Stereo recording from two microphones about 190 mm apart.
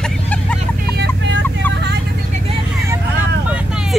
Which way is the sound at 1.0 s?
80° right.